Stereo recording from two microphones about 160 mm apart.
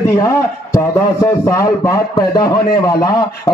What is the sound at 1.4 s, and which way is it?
A man's voice, 20° left (ahead or behind).